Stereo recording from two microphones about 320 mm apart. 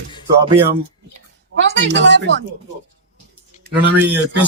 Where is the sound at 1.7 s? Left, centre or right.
Right.